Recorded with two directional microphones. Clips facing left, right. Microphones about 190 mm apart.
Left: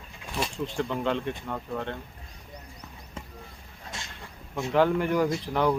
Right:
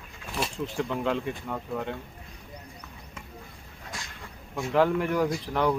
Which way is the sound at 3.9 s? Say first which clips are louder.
Even; 25° left (ahead or behind).